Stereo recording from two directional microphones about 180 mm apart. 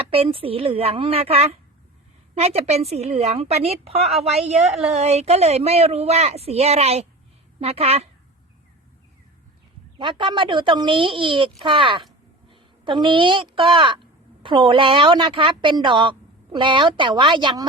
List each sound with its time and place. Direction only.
0.1 s a woman's voice: 30° right (ahead or behind)
10.0 s a woman's voice: 25° right (ahead or behind)